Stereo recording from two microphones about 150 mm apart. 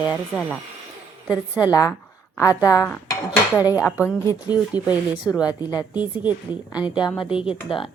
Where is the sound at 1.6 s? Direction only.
25° left (ahead or behind).